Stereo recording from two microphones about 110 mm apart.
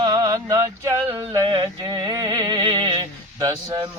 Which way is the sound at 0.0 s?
35° right (ahead or behind).